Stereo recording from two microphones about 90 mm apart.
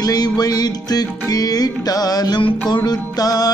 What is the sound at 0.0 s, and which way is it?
Music, 45° left (ahead or behind).